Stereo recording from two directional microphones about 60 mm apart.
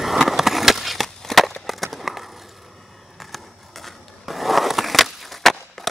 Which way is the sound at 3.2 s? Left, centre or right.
Centre.